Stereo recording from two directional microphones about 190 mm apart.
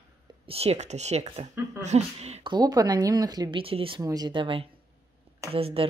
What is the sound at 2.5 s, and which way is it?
Speech, 20° right (ahead or behind).